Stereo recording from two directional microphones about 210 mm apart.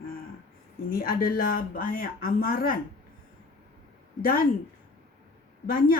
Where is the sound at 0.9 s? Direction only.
45° left (ahead or behind).